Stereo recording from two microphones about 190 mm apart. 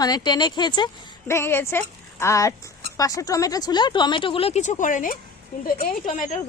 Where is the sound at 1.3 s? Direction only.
15° left (ahead or behind); by 5.1 s 45° left (ahead or behind).